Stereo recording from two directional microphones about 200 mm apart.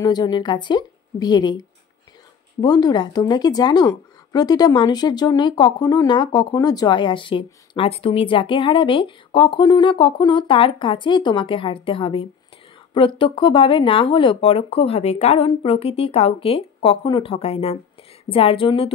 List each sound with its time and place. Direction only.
0.0 s speech: 20° left (ahead or behind)
2.6 s speech: 20° left (ahead or behind)